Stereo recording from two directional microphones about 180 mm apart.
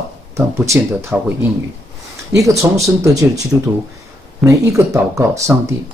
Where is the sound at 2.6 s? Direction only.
15° right (ahead or behind).